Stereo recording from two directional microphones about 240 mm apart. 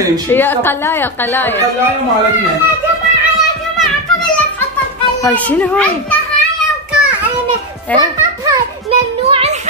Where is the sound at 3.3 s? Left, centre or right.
Centre.